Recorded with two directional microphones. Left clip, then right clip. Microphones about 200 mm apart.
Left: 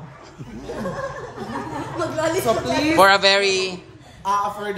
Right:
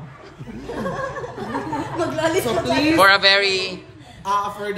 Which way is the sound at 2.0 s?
50° right (ahead or behind).